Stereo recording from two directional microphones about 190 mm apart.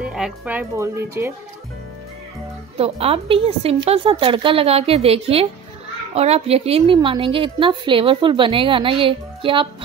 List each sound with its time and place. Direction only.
0.0 s speech: 5° right (ahead or behind)
2.8 s a woman's voice: 30° right (ahead or behind)